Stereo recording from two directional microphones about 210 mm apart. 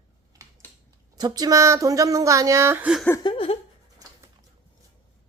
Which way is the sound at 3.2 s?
25° left (ahead or behind).